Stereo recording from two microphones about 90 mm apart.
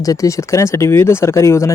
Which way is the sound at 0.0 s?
40° left (ahead or behind).